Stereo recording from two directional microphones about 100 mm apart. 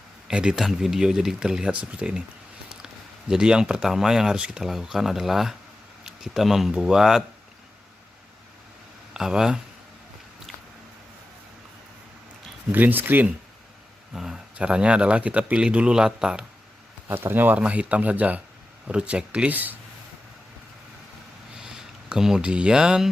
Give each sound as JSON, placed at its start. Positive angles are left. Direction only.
{"t": 0.3, "sound": "speech", "side_deg": -10}
{"t": 9.1, "sound": "speech", "side_deg": -5}
{"t": 12.7, "sound": "speech", "side_deg": -20}
{"t": 14.1, "sound": "speech", "side_deg": -5}
{"t": 17.1, "sound": "speech", "side_deg": -20}
{"t": 21.6, "sound": "speech", "side_deg": -5}